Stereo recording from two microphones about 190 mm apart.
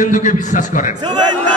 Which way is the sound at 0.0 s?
40° left (ahead or behind).